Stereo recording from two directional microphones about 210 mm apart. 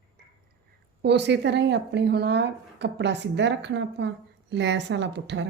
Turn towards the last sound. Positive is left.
turn(degrees=-55)  # may be behind; listen again after turning